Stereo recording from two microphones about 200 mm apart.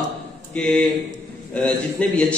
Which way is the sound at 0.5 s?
5° left (ahead or behind).